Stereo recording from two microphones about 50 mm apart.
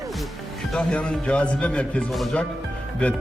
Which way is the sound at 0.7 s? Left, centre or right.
Centre.